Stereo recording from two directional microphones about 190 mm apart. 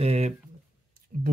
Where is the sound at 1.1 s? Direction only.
45° right (ahead or behind).